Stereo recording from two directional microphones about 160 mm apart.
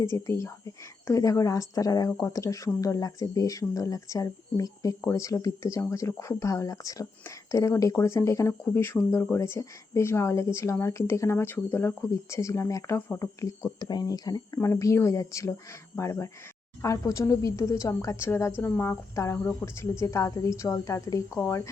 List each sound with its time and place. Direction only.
0.0 s a woman's voice: 20° left (ahead or behind)